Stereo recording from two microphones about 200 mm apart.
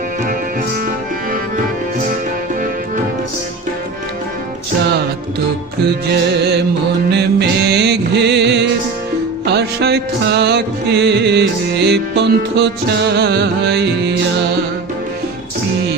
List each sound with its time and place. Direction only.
6.1 s music: 55° right (ahead or behind)